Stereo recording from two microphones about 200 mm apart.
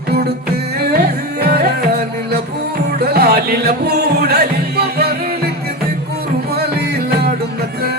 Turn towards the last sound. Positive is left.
turn(degrees=-50)  # may be behind; listen again after turning